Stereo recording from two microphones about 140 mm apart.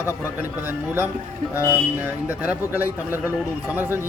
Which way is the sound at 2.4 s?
10° right (ahead or behind).